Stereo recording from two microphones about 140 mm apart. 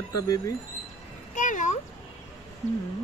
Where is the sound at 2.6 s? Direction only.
25° left (ahead or behind).